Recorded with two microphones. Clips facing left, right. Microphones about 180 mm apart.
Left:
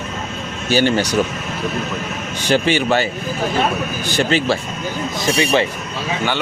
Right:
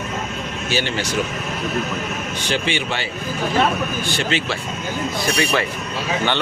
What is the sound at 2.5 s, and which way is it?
A man's voice, 40° left (ahead or behind).